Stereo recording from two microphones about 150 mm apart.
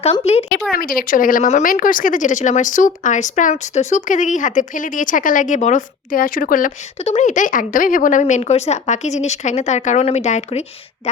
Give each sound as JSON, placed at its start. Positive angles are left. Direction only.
{"t": 0.0, "sound": "speech", "side_deg": 45}
{"t": 0.8, "sound": "speech", "side_deg": 75}
{"t": 7.0, "sound": "speech", "side_deg": 50}